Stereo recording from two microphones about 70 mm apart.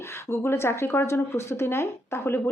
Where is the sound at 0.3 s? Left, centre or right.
Left.